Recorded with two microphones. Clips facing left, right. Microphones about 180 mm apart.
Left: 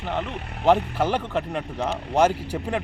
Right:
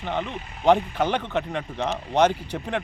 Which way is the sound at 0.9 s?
5° left (ahead or behind).